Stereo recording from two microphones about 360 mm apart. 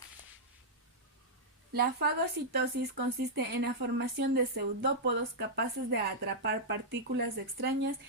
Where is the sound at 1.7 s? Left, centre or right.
Right.